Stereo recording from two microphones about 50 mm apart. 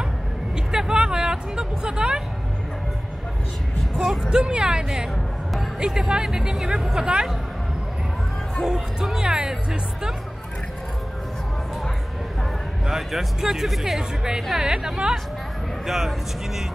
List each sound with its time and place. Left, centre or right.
0.7 s music: centre
3.9 s speech: centre
4.3 s speech: centre
8.6 s speech: centre
12.8 s speech: centre